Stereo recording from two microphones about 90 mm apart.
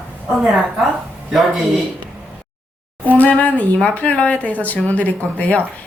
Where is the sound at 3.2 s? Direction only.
15° left (ahead or behind).